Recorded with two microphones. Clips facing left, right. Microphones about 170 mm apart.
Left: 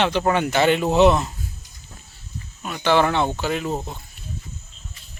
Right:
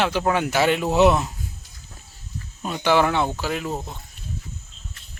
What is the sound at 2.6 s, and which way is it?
Speech, 25° right (ahead or behind).